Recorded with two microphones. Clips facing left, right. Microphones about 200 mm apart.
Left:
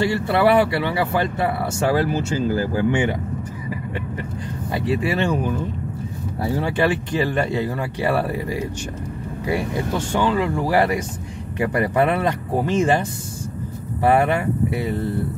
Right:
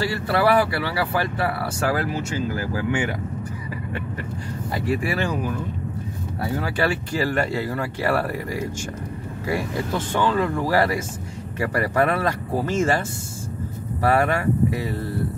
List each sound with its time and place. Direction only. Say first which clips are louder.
0.0 s speech: left 3 dB; 20° left (ahead or behind)
4.7 s speech: left 3 dB; 20° left (ahead or behind)
14.0 s speech: left 2 dB; 20° left (ahead or behind)